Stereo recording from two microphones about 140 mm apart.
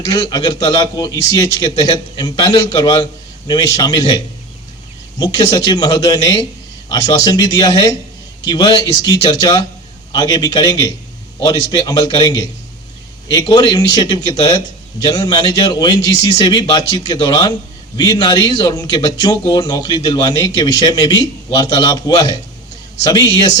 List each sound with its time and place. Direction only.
0.0 s a man's voice: 30° left (ahead or behind)
5.2 s a man's voice: 30° left (ahead or behind)